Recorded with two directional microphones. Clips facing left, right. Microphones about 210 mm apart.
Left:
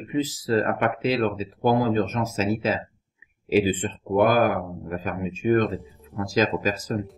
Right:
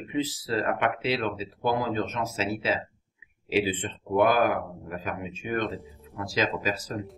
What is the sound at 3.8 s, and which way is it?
Speech, 40° left (ahead or behind).